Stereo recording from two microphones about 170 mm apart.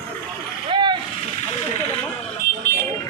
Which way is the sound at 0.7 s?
25° right (ahead or behind).